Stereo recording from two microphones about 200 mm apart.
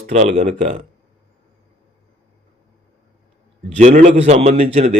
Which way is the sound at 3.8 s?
35° right (ahead or behind).